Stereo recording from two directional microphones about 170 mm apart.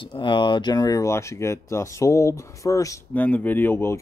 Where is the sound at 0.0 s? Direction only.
30° left (ahead or behind).